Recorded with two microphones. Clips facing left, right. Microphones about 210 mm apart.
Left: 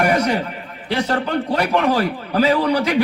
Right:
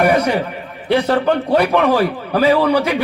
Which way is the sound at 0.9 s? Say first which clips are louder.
Right 6 dB; 60° right (ahead or behind).